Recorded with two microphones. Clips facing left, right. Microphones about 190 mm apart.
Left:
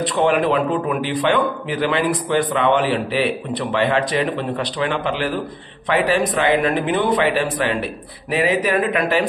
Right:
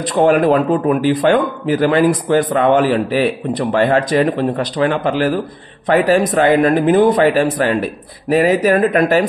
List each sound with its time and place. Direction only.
0.0 s a man's voice: 45° right (ahead or behind)